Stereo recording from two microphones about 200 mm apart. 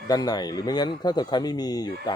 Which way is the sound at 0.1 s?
20° left (ahead or behind).